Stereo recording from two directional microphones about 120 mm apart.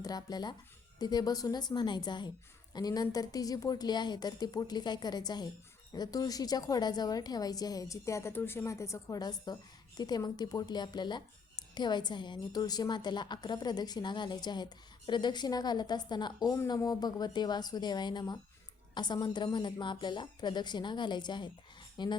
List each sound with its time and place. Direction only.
0.0 s speech: 35° left (ahead or behind)